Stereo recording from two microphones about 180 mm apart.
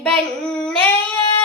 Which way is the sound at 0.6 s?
5° left (ahead or behind).